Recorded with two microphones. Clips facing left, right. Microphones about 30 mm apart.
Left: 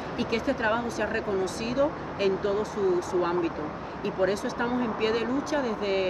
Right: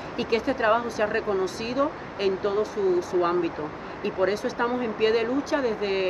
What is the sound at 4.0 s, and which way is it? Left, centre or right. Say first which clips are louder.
Speech: right 2 dB; right.